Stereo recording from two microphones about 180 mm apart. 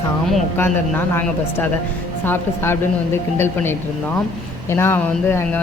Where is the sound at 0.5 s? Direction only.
10° left (ahead or behind).